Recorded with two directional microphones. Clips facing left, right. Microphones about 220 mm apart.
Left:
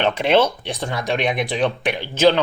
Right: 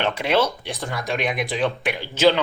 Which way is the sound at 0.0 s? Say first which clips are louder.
Left 4 dB; 25° left (ahead or behind).